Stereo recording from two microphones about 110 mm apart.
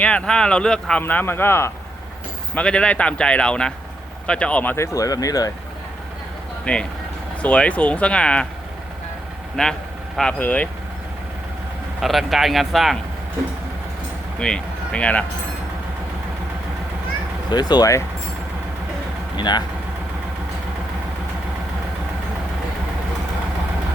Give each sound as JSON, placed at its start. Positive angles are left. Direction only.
{"t": 0.0, "sound": "speech", "side_deg": 10}
{"t": 1.0, "sound": "a man's voice", "side_deg": 20}
{"t": 2.6, "sound": "speech", "side_deg": 10}
{"t": 4.9, "sound": "speech", "side_deg": 35}
{"t": 6.7, "sound": "speech", "side_deg": 10}
{"t": 9.6, "sound": "speech", "side_deg": 5}
{"t": 11.9, "sound": "speech", "side_deg": 0}
{"t": 14.3, "sound": "speech", "side_deg": 10}
{"t": 17.5, "sound": "speech", "side_deg": 40}
{"t": 19.4, "sound": "speech", "side_deg": 40}